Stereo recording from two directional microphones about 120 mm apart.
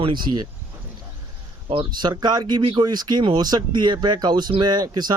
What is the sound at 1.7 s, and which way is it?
Speech, 45° right (ahead or behind).